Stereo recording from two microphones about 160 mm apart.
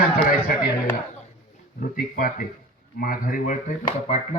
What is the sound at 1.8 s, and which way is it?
Speech, 60° left (ahead or behind).